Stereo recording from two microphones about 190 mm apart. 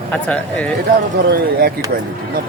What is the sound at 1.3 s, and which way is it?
Speech, 55° right (ahead or behind).